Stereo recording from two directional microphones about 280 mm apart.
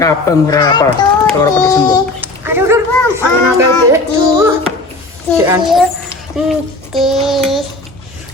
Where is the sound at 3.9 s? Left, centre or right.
Centre.